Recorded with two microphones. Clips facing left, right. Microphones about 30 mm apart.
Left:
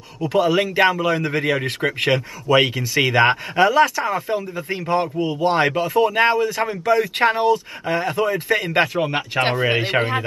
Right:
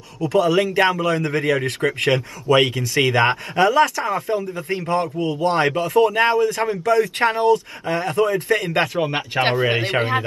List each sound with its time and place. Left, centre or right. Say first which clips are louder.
0.2 s speech: even; centre
0.5 s speech: left 2 dB; centre
2.0 s speech: even; centre
5.6 s speech: right 2 dB; centre